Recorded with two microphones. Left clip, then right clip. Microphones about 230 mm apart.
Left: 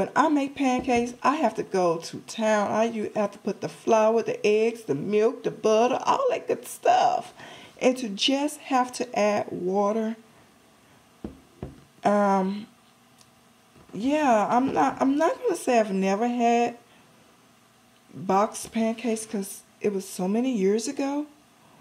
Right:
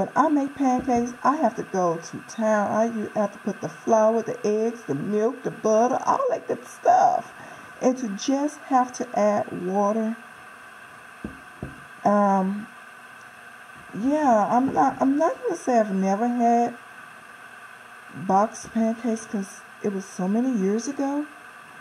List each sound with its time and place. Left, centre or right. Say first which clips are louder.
0.3 s a woman's voice: right 2 dB; left
12.0 s a woman's voice: right 2 dB; left
14.2 s a woman's voice: right 2 dB; left
18.2 s a woman's voice: right 2 dB; left